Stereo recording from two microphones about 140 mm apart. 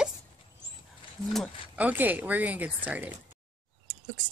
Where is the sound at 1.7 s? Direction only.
10° right (ahead or behind).